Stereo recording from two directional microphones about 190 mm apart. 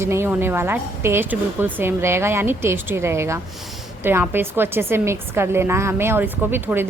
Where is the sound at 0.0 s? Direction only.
15° right (ahead or behind).